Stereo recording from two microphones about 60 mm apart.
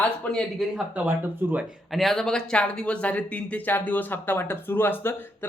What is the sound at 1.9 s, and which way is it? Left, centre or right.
Speech, centre.